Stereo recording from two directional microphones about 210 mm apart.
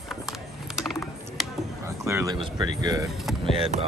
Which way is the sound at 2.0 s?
15° right (ahead or behind).